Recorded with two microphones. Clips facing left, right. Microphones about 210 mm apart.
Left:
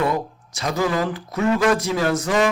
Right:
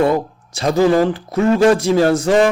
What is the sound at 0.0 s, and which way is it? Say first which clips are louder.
A man's voice: right 7 dB; 30° right (ahead or behind).